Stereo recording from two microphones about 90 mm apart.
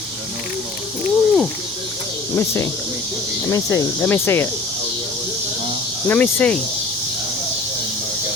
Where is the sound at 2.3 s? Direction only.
30° left (ahead or behind).